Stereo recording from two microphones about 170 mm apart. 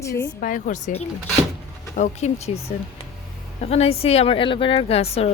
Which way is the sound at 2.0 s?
40° left (ahead or behind).